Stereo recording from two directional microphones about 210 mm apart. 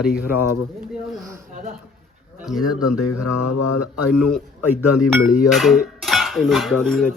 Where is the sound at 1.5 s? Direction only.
40° right (ahead or behind).